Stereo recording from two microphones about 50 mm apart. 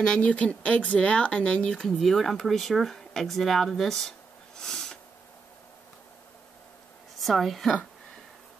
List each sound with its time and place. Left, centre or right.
0.2 s speech: left
1.7 s speech: centre
4.6 s a sound: centre
7.2 s a woman's voice: centre